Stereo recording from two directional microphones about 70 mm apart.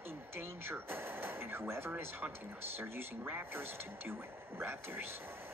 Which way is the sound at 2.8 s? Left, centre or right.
Right.